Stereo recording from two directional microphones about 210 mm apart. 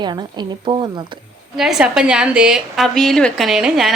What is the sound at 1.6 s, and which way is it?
A woman's voice, centre (ahead or behind).